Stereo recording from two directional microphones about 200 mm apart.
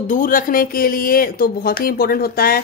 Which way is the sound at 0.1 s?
45° left (ahead or behind).